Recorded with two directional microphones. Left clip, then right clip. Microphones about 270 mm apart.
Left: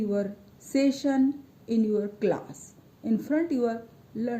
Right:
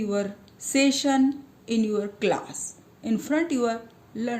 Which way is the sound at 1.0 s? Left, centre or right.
Centre.